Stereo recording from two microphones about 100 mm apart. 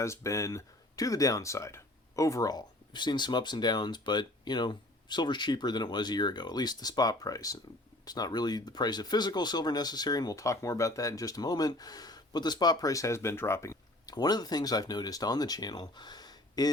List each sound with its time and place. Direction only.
0.0 s speech: 30° left (ahead or behind)
14.2 s speech: 40° left (ahead or behind)